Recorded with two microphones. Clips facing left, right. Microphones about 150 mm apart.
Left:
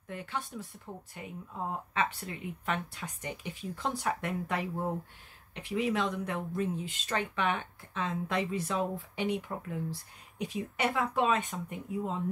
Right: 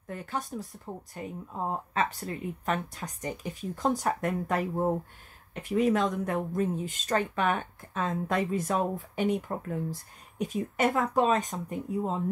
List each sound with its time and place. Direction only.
0.1 s speech: 40° right (ahead or behind)